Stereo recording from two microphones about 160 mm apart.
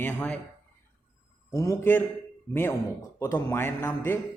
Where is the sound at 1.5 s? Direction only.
20° left (ahead or behind).